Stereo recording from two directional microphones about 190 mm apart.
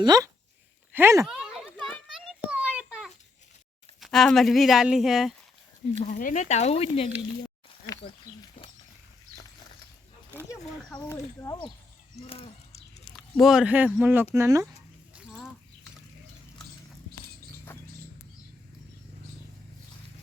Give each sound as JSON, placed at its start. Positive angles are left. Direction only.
{"t": 0.0, "sound": "speech", "side_deg": -20}
{"t": 1.2, "sound": "a sound", "side_deg": 0}
{"t": 4.0, "sound": "speech", "side_deg": 0}
{"t": 6.0, "sound": "speech", "side_deg": 45}
{"t": 11.0, "sound": "speech", "side_deg": 20}
{"t": 12.3, "sound": "a sound", "side_deg": 30}
{"t": 13.1, "sound": "speech", "side_deg": 5}
{"t": 14.6, "sound": "dog", "side_deg": -5}